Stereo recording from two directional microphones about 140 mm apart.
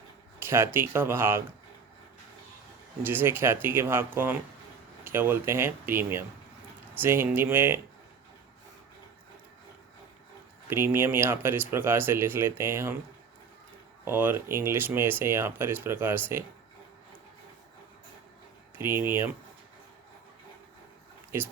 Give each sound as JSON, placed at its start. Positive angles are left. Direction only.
{"t": 0.3, "sound": "speech", "side_deg": -20}
{"t": 3.0, "sound": "speech", "side_deg": -15}
{"t": 10.7, "sound": "speech", "side_deg": -15}
{"t": 14.0, "sound": "speech", "side_deg": -15}
{"t": 18.8, "sound": "speech", "side_deg": -15}